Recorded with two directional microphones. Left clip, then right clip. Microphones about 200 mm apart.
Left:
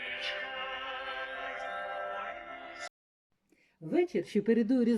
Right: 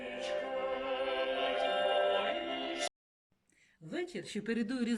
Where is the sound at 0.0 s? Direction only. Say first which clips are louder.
Left 1 dB; 25° right (ahead or behind); by 2.8 s 50° right (ahead or behind).